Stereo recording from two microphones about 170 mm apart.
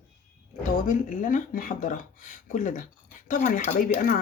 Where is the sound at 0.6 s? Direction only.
50° left (ahead or behind).